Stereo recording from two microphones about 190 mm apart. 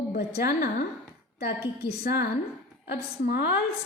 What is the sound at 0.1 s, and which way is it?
A woman's voice, 55° left (ahead or behind).